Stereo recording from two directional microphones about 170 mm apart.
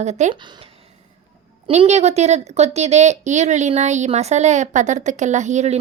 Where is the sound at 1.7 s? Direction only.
40° right (ahead or behind).